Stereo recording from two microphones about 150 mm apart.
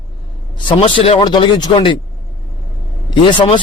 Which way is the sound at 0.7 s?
35° left (ahead or behind).